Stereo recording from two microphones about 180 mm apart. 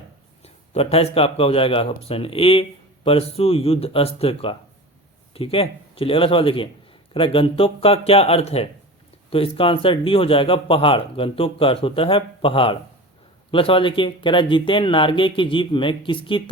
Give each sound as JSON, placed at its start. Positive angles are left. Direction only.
{"t": 0.4, "sound": "speech", "side_deg": 35}